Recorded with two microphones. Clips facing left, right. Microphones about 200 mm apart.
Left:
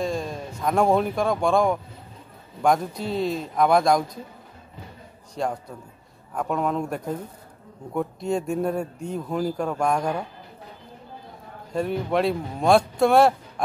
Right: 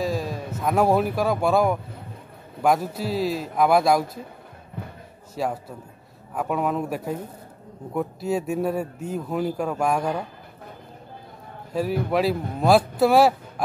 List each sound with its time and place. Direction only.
0.0 s a man's voice: 5° right (ahead or behind)
5.3 s a man's voice: 5° right (ahead or behind)
11.7 s a man's voice: 5° right (ahead or behind)